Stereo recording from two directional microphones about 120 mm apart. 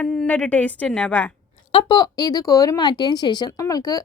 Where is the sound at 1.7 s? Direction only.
45° left (ahead or behind).